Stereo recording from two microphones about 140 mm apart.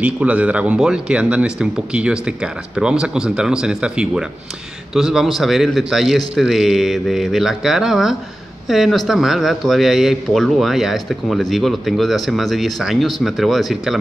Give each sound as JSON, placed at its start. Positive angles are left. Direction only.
{"t": 0.0, "sound": "a man's voice", "side_deg": -10}